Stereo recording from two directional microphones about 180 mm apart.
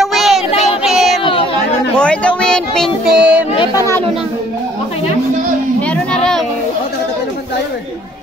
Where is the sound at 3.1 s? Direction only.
5° right (ahead or behind).